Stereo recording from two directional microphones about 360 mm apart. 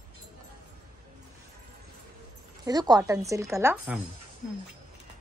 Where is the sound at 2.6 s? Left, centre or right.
Centre.